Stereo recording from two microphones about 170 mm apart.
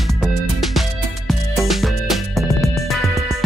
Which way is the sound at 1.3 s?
Centre (ahead or behind).